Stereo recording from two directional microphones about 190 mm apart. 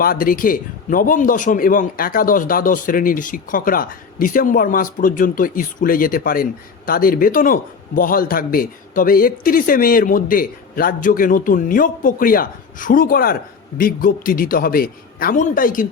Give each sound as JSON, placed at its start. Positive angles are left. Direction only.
{"t": 0.0, "sound": "a man's voice", "side_deg": 50}